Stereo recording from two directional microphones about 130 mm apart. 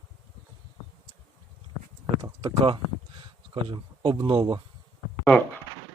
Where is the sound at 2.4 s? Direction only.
40° right (ahead or behind).